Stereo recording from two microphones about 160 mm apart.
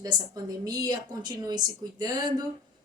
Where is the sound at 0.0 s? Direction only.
25° right (ahead or behind).